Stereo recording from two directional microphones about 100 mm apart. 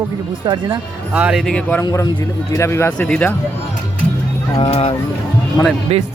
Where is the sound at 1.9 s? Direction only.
30° left (ahead or behind).